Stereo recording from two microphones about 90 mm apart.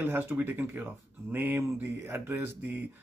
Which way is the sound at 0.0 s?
20° right (ahead or behind).